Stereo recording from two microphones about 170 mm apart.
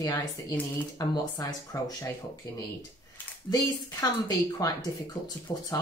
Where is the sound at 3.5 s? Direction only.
20° left (ahead or behind).